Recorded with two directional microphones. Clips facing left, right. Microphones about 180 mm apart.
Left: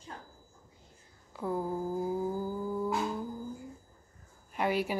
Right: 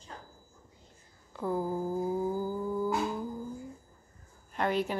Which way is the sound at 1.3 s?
Centre (ahead or behind).